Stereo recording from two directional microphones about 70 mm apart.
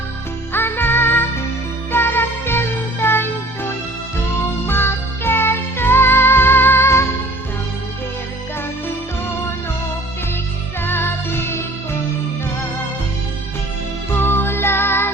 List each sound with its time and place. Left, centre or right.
0.5 s music: left
10.8 s music: left
14.1 s music: left